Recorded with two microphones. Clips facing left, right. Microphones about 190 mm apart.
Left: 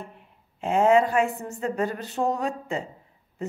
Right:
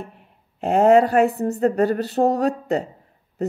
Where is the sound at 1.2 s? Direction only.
35° right (ahead or behind).